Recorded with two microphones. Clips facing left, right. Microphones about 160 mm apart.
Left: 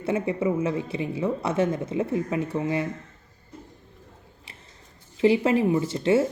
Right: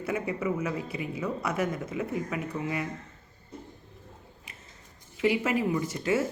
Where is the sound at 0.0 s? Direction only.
25° left (ahead or behind).